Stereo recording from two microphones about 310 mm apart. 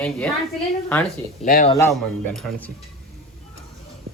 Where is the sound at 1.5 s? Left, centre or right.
Left.